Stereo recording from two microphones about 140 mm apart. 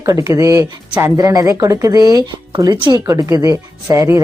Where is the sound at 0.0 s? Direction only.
25° right (ahead or behind).